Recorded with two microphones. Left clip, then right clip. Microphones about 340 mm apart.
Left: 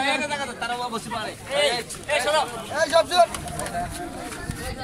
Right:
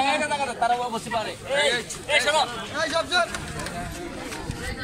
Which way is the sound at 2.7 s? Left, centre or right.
Left.